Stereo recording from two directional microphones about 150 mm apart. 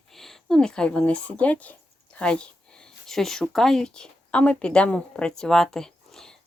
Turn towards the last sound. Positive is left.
turn(degrees=5)  # may be behind; listen again after turning